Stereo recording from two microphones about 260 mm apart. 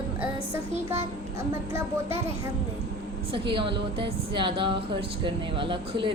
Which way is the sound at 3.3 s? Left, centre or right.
Centre.